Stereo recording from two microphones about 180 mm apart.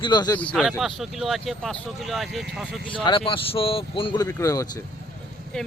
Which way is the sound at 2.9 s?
30° left (ahead or behind).